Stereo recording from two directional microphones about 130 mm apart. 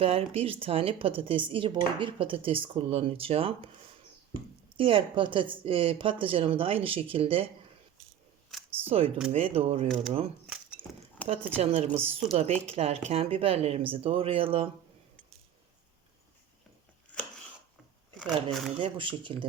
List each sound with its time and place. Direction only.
0.0 s speech: 50° right (ahead or behind)
4.8 s a woman's voice: 40° right (ahead or behind)
8.9 s speech: 50° right (ahead or behind)
10.4 s keys jangling: 5° right (ahead or behind)
11.3 s speech: 55° right (ahead or behind)
18.8 s a woman's voice: 40° right (ahead or behind)